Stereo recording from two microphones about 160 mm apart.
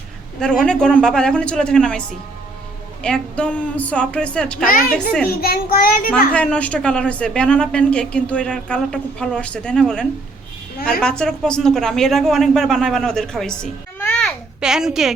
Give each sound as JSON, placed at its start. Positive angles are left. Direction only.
{"t": 0.3, "sound": "speech", "side_deg": 5}
{"t": 4.6, "sound": "a woman's voice", "side_deg": 60}
{"t": 6.3, "sound": "speech", "side_deg": 5}
{"t": 14.6, "sound": "speech", "side_deg": -5}